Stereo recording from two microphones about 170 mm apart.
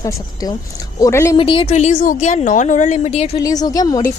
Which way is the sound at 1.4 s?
30° left (ahead or behind).